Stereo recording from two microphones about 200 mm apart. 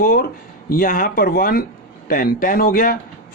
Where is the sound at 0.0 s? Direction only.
45° left (ahead or behind).